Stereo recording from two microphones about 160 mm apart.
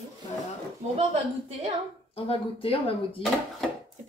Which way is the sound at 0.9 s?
45° right (ahead or behind).